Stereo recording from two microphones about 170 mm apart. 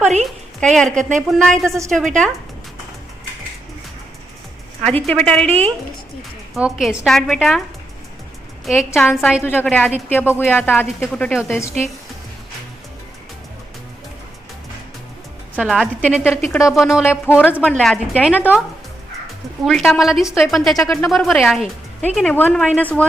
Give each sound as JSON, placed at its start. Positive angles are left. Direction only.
{"t": 0.0, "sound": "a woman's voice", "side_deg": -40}
{"t": 0.6, "sound": "a woman's voice", "side_deg": 5}
{"t": 1.6, "sound": "a woman's voice", "side_deg": -15}
{"t": 1.9, "sound": "a woman's voice", "side_deg": 5}
{"t": 4.9, "sound": "a woman's voice", "side_deg": 5}
{"t": 5.5, "sound": "a woman's voice", "side_deg": -35}
{"t": 6.5, "sound": "a woman's voice", "side_deg": -5}
{"t": 8.6, "sound": "a woman's voice", "side_deg": -5}
{"t": 9.4, "sound": "a woman's voice", "side_deg": 10}
{"t": 15.5, "sound": "a woman's voice", "side_deg": 0}
{"t": 18.1, "sound": "a woman's voice", "side_deg": -5}
{"t": 19.6, "sound": "a woman's voice", "side_deg": 0}